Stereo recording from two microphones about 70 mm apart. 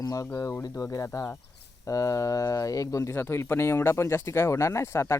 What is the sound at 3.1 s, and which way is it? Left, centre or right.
Speech, left.